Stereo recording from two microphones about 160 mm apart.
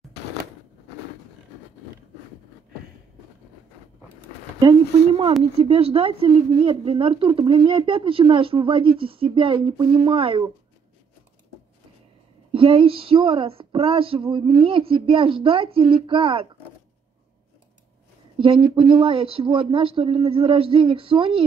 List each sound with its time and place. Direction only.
5.6 s speech: 35° right (ahead or behind)
12.5 s speech: 35° right (ahead or behind)
18.4 s speech: 30° right (ahead or behind)